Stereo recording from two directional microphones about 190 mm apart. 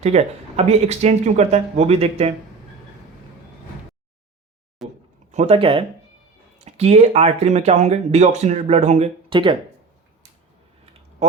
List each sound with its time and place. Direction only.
0.0 s speech: 35° right (ahead or behind)
4.8 s a sound: centre (ahead or behind)
5.3 s speech: 35° right (ahead or behind)
9.3 s speech: 25° right (ahead or behind)